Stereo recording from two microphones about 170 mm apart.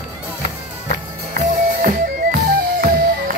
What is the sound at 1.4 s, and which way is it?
Music, 50° right (ahead or behind).